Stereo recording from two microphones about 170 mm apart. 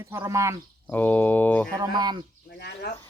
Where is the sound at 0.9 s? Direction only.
10° left (ahead or behind).